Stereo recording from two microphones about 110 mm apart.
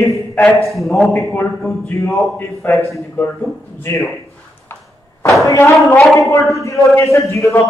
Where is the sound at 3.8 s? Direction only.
25° left (ahead or behind).